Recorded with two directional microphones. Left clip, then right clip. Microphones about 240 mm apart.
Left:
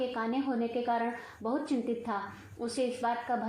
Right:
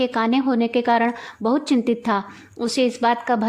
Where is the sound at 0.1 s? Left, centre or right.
Right.